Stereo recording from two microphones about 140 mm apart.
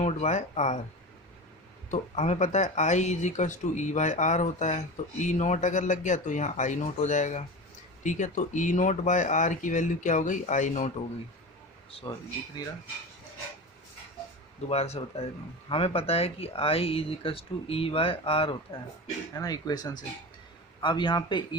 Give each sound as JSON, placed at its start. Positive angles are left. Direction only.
{"t": 0.0, "sound": "speech", "side_deg": 55}
{"t": 1.9, "sound": "speech", "side_deg": 55}
{"t": 11.9, "sound": "speech", "side_deg": 40}
{"t": 14.7, "sound": "speech", "side_deg": 45}
{"t": 19.3, "sound": "speech", "side_deg": 25}